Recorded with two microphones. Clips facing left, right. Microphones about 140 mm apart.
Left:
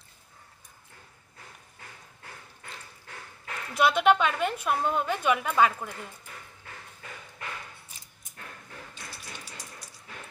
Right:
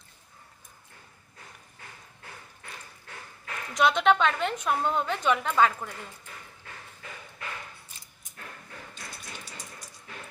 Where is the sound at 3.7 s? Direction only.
5° left (ahead or behind).